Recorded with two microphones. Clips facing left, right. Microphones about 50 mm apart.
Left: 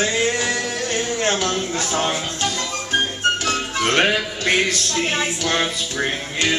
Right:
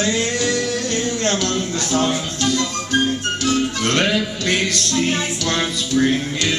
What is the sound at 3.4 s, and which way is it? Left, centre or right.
Music, left.